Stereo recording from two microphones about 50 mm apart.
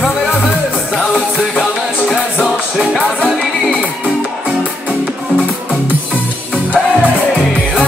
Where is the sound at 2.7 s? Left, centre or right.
Centre.